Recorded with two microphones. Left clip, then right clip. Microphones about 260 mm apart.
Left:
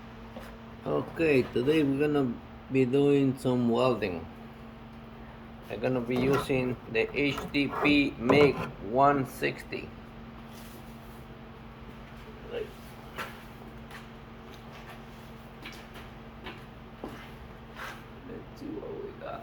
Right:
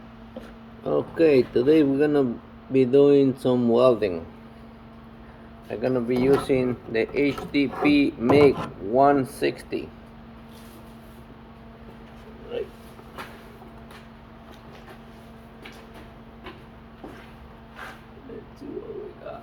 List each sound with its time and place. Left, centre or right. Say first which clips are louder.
1.1 s speech: right 8 dB; centre
5.7 s speech: right 6 dB; centre